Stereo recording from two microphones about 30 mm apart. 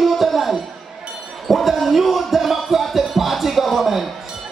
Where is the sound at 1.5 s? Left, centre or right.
Centre.